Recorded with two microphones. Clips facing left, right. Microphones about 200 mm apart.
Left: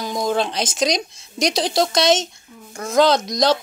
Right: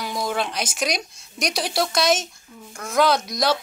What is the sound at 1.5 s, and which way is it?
Speech, 20° left (ahead or behind).